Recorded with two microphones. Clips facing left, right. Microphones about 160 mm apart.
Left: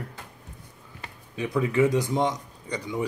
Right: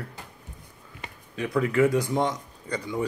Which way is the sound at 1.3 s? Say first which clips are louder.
Even; 20° left (ahead or behind).